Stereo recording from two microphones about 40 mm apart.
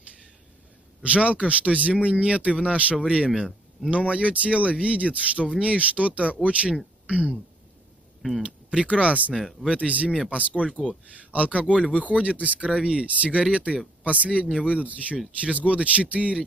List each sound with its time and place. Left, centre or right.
1.0 s speech: right
3.0 s speech: right
3.3 s speech: centre
4.1 s speech: right
8.4 s a sound: right
8.8 s speech: right
9.3 s speech: centre
9.7 s speech: right
11.1 s speech: right
11.7 s speech: right
12.0 s speech: right
14.4 s speech: centre
14.7 s speech: right